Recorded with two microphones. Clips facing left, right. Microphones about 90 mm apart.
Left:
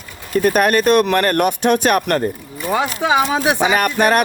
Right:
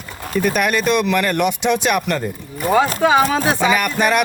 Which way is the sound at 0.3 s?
45° left (ahead or behind).